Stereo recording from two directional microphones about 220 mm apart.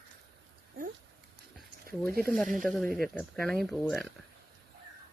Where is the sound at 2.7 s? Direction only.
5° left (ahead or behind).